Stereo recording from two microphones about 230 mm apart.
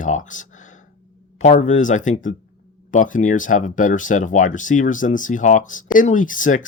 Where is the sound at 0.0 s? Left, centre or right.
Left.